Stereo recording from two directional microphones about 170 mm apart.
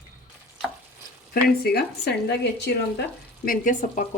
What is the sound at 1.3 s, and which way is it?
Speech, 70° left (ahead or behind).